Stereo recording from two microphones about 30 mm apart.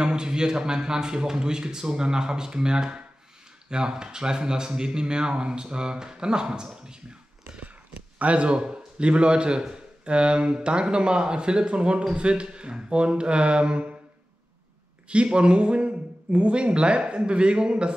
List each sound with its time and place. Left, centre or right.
0.0 s speech: right
8.2 s a man's voice: right
15.3 s a man's voice: right